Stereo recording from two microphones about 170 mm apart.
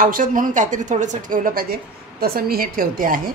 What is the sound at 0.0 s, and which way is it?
Speech, 55° right (ahead or behind).